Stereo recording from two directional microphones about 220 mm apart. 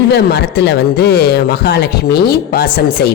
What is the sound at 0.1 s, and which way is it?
Speech, 50° left (ahead or behind).